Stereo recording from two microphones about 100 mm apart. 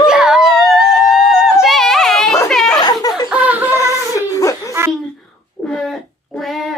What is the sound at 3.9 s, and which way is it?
Baby cry, 35° left (ahead or behind).